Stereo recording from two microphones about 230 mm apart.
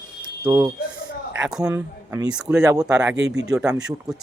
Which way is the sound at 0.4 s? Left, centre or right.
Centre.